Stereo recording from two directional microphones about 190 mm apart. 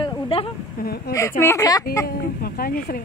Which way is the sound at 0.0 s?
30° left (ahead or behind).